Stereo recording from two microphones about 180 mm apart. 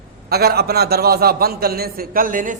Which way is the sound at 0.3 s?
60° right (ahead or behind).